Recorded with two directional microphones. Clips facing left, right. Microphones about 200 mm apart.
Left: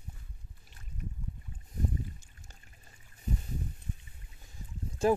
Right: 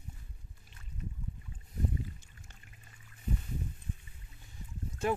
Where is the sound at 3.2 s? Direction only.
40° left (ahead or behind).